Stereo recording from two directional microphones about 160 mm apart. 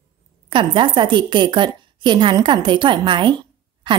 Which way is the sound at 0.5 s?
30° right (ahead or behind).